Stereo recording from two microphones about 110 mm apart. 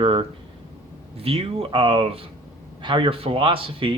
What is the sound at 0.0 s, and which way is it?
A man's voice, 55° right (ahead or behind).